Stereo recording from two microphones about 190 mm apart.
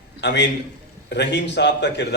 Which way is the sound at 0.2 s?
65° left (ahead or behind).